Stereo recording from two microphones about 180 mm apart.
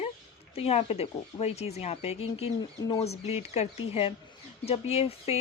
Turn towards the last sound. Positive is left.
turn(degrees=35)  # may be behind; listen again after turning